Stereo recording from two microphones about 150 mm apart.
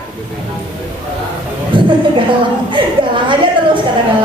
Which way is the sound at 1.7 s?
35° right (ahead or behind).